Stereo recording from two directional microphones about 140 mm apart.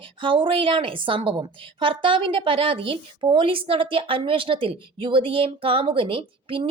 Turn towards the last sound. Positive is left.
turn(degrees=-40)  # may be behind; listen again after turning